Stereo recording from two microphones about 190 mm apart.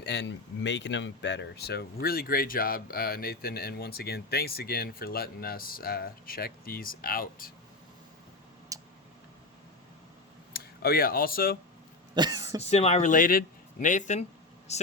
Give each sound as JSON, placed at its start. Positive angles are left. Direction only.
{"t": 0.0, "sound": "speech", "side_deg": 65}
{"t": 8.7, "sound": "tick", "side_deg": -20}
{"t": 10.5, "sound": "speech", "side_deg": 50}
{"t": 12.1, "sound": "speech", "side_deg": -20}
{"t": 12.6, "sound": "speech", "side_deg": 35}